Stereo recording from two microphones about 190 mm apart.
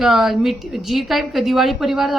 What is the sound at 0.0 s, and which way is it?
A woman's voice, centre (ahead or behind).